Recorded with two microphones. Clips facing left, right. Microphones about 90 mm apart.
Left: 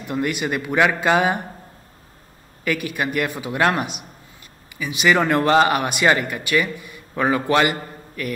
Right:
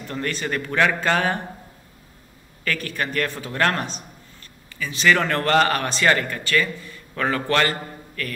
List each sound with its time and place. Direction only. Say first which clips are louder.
0.0 s speech: left 4 dB; 15° left (ahead or behind)
2.6 s speech: left 3 dB; 15° left (ahead or behind)